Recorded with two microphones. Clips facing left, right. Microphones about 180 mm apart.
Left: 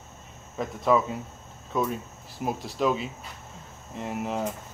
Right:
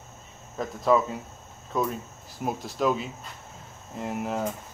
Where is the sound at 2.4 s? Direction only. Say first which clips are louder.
Even; centre (ahead or behind).